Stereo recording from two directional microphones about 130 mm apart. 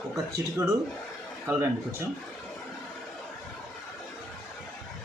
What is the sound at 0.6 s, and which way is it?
Speech, 25° right (ahead or behind).